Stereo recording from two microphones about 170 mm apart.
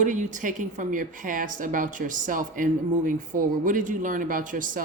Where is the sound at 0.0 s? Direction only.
45° right (ahead or behind).